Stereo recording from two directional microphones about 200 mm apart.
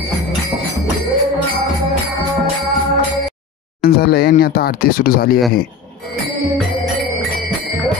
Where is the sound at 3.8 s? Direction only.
50° left (ahead or behind).